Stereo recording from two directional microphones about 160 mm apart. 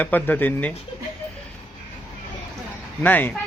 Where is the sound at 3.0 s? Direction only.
10° left (ahead or behind).